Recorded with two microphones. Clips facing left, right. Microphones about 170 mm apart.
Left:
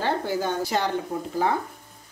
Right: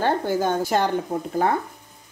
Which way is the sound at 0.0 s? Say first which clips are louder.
Right 4 dB; 45° right (ahead or behind).